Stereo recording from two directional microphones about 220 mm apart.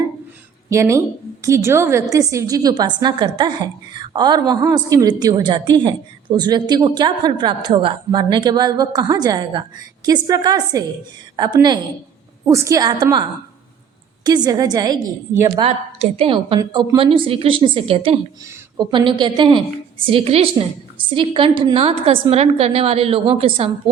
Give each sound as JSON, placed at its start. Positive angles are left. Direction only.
{"t": 0.7, "sound": "a woman's voice", "side_deg": -15}
{"t": 14.3, "sound": "a woman's voice", "side_deg": -20}
{"t": 15.6, "sound": "a woman's voice", "side_deg": -25}